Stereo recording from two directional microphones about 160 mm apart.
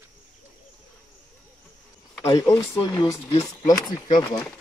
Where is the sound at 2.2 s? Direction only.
20° left (ahead or behind).